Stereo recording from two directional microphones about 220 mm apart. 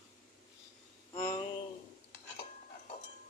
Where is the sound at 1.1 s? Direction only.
15° left (ahead or behind).